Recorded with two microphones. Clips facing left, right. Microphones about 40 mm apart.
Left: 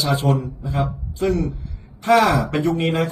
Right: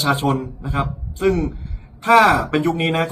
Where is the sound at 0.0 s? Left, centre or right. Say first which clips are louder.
Right 2 dB; right.